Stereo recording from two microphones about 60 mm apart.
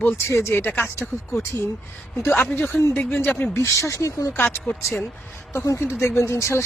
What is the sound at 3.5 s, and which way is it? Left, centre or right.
Speech, left.